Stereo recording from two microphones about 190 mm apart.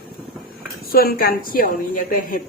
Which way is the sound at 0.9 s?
50° left (ahead or behind).